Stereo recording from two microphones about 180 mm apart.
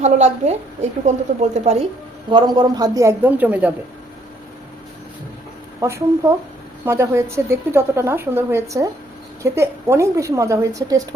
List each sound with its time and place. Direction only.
0.0 s a woman's voice: 40° right (ahead or behind)
2.3 s a woman's voice: 25° right (ahead or behind)
5.8 s a woman's voice: 15° right (ahead or behind)